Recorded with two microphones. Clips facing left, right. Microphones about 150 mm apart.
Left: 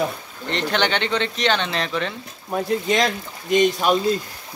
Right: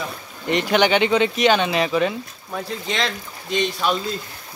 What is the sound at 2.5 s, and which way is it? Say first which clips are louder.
Speech: left 6 dB; 45° left (ahead or behind).